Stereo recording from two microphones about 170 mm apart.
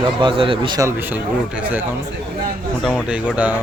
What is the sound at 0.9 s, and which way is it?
Speech, 10° right (ahead or behind).